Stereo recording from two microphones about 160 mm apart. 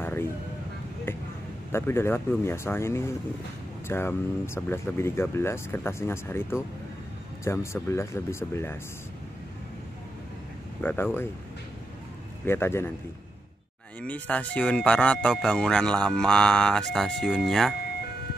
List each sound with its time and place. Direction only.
0.0 s a sound: 15° left (ahead or behind)
1.7 s speech: 15° left (ahead or behind)
10.8 s speech: 15° left (ahead or behind)
12.4 s speech: 15° left (ahead or behind)
14.0 s speech: 10° left (ahead or behind)